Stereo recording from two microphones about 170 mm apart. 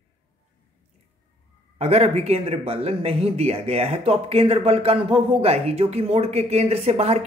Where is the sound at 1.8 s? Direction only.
35° right (ahead or behind).